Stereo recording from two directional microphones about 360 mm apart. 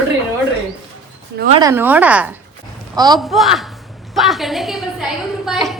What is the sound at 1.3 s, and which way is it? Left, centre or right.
Speech, right.